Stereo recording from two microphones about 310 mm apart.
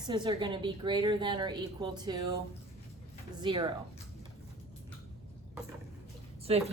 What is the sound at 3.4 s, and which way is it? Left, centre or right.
Speech, centre.